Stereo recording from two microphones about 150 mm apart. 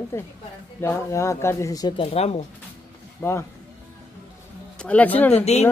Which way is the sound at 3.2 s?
15° left (ahead or behind).